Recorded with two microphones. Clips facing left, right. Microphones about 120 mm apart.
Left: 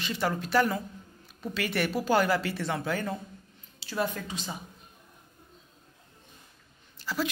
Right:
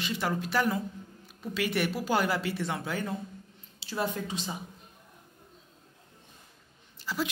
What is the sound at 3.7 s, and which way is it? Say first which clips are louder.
Speech: left 1 dB; 25° right (ahead or behind).